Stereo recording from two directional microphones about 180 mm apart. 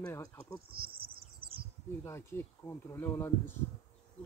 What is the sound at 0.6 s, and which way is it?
Insect, 55° right (ahead or behind).